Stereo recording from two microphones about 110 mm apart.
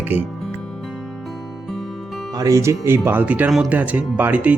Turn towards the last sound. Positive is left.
turn(degrees=-15)  # may be behind; listen again after turning